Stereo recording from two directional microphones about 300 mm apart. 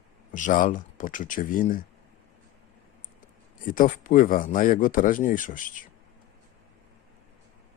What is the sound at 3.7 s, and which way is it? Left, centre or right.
Speech, left.